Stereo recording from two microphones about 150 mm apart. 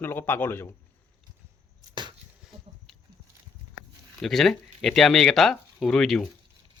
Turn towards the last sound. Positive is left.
turn(degrees=0)  # may be behind; listen again after turning